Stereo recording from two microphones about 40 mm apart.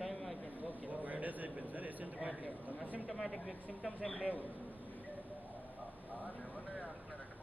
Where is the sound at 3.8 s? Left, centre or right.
Centre.